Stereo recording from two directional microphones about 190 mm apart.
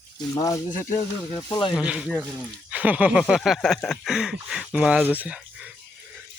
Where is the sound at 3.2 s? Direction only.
Centre (ahead or behind).